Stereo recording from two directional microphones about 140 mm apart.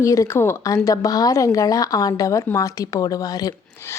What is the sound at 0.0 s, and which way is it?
Speech, 20° left (ahead or behind).